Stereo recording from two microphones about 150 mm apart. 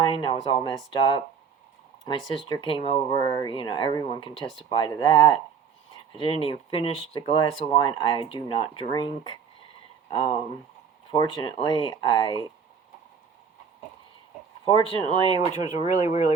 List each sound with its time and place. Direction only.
0.0 s speech: 35° left (ahead or behind)
14.6 s speech: 35° left (ahead or behind)
15.7 s speech: 50° left (ahead or behind)